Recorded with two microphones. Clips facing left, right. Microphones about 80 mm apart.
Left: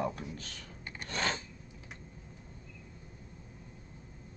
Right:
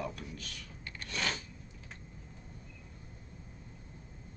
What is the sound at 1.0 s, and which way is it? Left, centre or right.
Filing, left.